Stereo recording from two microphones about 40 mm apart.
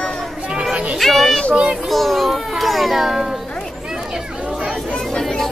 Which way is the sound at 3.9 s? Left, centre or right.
Centre.